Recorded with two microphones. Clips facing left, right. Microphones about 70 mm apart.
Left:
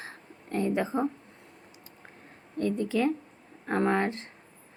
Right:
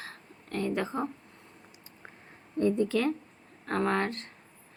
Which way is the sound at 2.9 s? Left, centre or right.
Centre.